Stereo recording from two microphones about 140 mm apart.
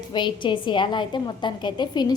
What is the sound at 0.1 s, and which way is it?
A woman's voice, 35° left (ahead or behind).